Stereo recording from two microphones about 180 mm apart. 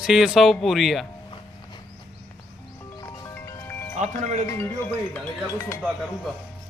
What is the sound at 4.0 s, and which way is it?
Speech, 40° right (ahead or behind).